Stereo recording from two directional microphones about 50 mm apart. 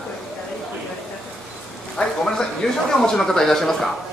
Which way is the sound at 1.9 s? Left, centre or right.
Centre.